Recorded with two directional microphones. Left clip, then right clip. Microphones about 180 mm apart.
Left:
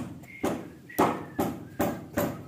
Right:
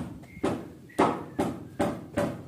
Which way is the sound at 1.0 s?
55° left (ahead or behind).